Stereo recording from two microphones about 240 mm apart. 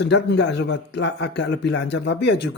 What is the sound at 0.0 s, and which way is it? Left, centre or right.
Speech, left.